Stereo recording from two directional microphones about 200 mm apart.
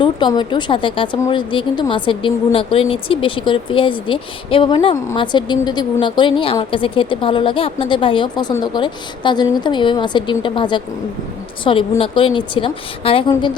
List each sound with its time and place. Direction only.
0.0 s a woman's voice: 20° left (ahead or behind)